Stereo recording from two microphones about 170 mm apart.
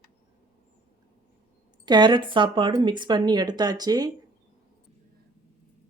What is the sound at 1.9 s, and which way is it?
Speech, 25° right (ahead or behind).